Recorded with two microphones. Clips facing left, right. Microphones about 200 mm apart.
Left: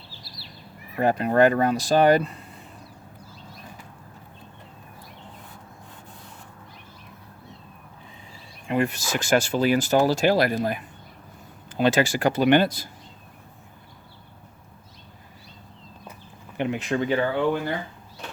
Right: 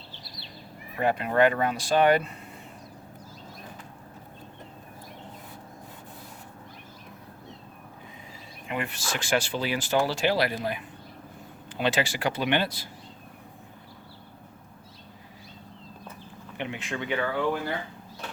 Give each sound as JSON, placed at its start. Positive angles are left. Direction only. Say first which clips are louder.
{"t": 0.9, "sound": "speech", "louder": "left 4 dB", "side_deg": 40}
{"t": 8.6, "sound": "speech", "louder": "left 8 dB", "side_deg": 40}
{"t": 16.6, "sound": "speech", "louder": "left 8 dB", "side_deg": 40}